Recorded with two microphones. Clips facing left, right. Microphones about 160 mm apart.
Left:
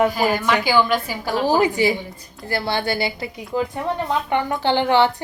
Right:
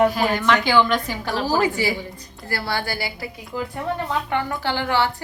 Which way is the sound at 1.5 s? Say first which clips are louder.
Left 4 dB; 20° left (ahead or behind).